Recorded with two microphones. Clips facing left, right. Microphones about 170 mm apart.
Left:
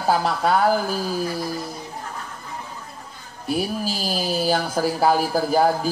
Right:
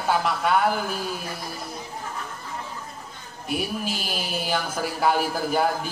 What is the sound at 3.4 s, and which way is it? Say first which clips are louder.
Speech: left 4 dB; 35° left (ahead or behind).